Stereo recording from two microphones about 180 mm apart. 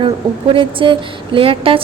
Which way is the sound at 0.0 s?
30° right (ahead or behind).